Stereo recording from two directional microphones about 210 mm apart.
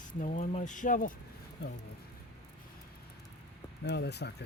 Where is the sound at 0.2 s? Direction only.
35° left (ahead or behind).